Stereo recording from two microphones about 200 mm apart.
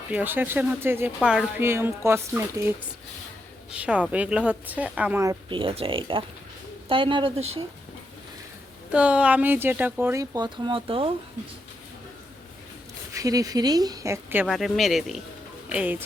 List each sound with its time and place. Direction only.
0.1 s speech: 10° right (ahead or behind); by 7.6 s 30° right (ahead or behind)
8.9 s speech: 5° right (ahead or behind); by 11.1 s 25° right (ahead or behind)
13.1 s speech: 15° right (ahead or behind)